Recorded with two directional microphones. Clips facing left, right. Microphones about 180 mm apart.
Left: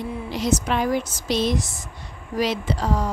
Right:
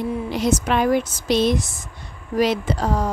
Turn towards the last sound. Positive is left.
turn(degrees=-50)  # may be behind; listen again after turning